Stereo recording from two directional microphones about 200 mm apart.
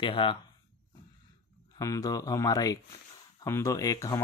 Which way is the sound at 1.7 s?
15° left (ahead or behind).